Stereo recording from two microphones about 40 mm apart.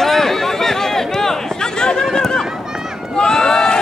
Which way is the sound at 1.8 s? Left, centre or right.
Centre.